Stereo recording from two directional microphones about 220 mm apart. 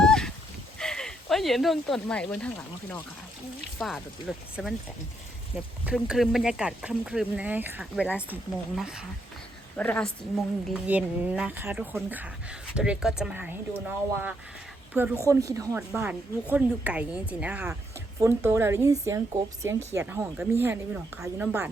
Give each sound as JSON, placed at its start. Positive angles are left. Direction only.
{"t": 0.1, "sound": "a sound", "side_deg": 5}
{"t": 0.8, "sound": "speech", "side_deg": 5}
{"t": 5.8, "sound": "a woman's voice", "side_deg": -5}
{"t": 10.8, "sound": "speech", "side_deg": -5}